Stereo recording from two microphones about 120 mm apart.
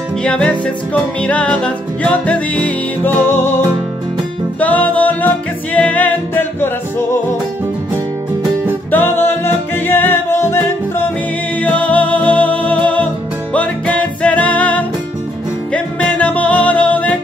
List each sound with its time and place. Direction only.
0.2 s music: 10° left (ahead or behind)
8.9 s music: 20° left (ahead or behind)